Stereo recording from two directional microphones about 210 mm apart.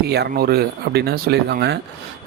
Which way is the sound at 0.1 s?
50° right (ahead or behind).